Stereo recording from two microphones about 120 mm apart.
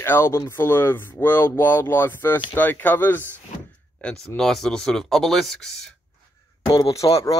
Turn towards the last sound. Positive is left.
turn(degrees=30)  # may be behind; listen again after turning